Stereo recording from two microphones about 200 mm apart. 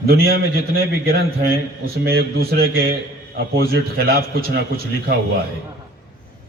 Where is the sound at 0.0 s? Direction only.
50° right (ahead or behind).